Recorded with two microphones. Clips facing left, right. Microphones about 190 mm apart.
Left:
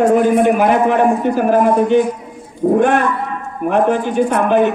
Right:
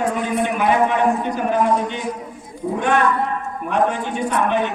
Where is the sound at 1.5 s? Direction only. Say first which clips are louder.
Left 7 dB; 55° left (ahead or behind).